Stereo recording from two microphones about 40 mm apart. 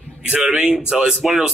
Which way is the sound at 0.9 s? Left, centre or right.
Centre.